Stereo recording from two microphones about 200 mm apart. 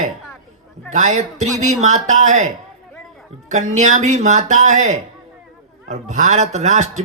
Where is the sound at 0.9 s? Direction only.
35° right (ahead or behind).